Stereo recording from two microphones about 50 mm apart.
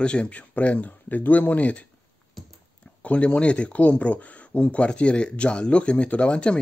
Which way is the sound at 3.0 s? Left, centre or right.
Left.